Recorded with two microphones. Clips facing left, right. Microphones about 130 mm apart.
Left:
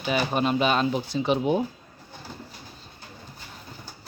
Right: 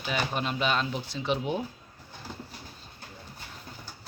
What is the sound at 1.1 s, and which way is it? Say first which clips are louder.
Speech: left 6 dB; 5° left (ahead or behind).